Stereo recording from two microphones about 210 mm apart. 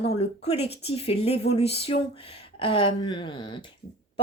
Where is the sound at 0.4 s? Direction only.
30° left (ahead or behind).